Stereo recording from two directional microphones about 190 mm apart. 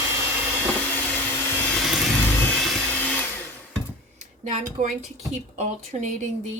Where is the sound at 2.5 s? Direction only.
5° left (ahead or behind).